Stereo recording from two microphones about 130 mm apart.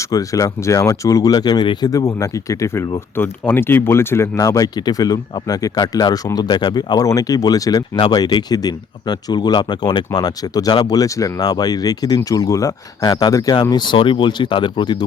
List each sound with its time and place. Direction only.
0.1 s speech: 25° left (ahead or behind)